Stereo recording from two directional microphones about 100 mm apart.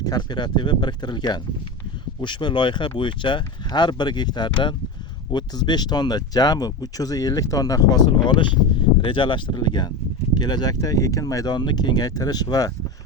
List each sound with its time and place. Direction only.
0.0 s speech: 45° left (ahead or behind)